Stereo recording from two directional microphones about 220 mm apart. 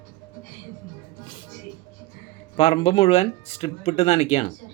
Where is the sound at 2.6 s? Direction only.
25° left (ahead or behind).